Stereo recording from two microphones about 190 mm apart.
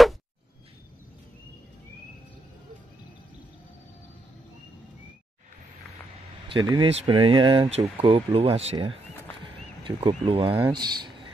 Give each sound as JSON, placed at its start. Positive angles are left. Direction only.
{"t": 6.7, "sound": "speech", "side_deg": -30}